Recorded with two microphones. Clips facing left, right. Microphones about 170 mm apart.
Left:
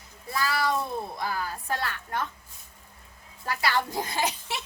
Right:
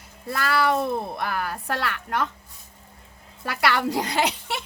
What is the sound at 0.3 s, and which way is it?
Speech, 65° right (ahead or behind).